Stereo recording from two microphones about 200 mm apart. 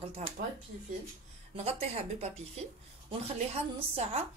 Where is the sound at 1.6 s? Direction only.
30° right (ahead or behind).